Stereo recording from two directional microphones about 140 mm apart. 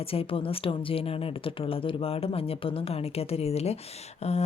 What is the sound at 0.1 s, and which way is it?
Speech, 40° left (ahead or behind).